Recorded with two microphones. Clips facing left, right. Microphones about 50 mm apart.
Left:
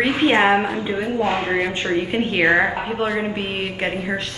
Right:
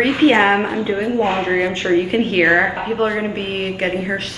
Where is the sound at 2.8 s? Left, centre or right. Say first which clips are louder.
Right 3 dB; centre.